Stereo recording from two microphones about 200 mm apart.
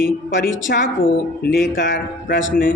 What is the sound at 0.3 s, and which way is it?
A man's voice, 45° left (ahead or behind).